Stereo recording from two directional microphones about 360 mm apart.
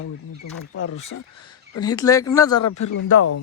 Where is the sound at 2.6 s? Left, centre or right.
Left.